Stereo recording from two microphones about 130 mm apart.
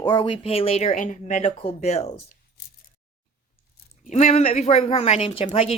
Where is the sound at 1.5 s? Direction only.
55° left (ahead or behind).